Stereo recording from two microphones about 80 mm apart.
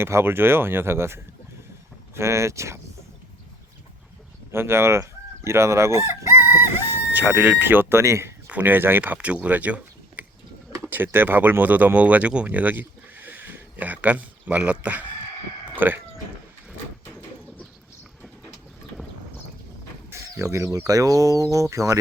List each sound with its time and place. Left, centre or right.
0.0 s speech: right
4.5 s fowl: right
6.7 s speech: right
8.4 s speech: right
20.1 s bird: right
20.7 s speech: right